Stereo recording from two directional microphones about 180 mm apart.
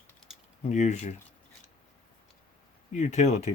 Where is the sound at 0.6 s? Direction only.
40° left (ahead or behind).